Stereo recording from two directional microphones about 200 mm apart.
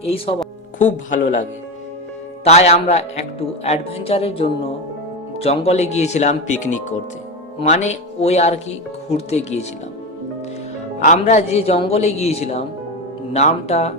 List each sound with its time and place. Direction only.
0.8 s speech: 40° left (ahead or behind)
11.0 s speech: 35° left (ahead or behind)